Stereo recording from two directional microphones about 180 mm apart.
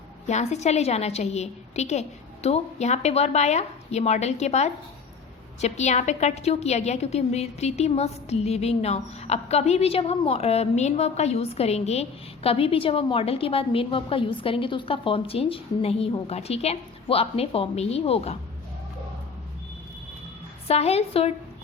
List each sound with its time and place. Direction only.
0.3 s a woman's voice: 40° left (ahead or behind)
20.7 s a woman's voice: 35° left (ahead or behind)